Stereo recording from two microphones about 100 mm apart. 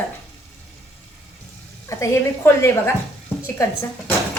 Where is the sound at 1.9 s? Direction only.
25° left (ahead or behind).